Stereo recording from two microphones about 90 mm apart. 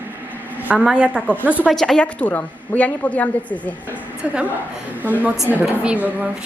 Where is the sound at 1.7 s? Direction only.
5° left (ahead or behind).